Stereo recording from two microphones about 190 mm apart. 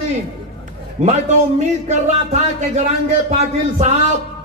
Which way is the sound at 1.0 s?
40° right (ahead or behind).